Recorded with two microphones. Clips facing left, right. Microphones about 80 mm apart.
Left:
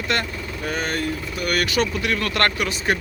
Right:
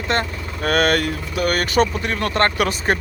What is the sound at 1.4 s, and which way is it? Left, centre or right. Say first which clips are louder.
Speech: right 4 dB; right.